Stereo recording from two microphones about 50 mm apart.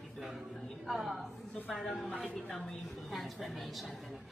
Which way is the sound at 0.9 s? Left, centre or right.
Centre.